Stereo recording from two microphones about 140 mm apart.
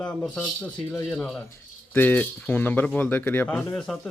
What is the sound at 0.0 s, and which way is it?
A man's voice, 5° left (ahead or behind).